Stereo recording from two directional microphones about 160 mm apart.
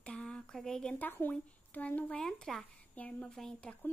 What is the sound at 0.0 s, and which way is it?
Speech, 5° left (ahead or behind).